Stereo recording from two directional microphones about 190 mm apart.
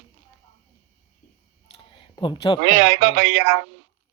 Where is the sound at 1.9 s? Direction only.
25° left (ahead or behind).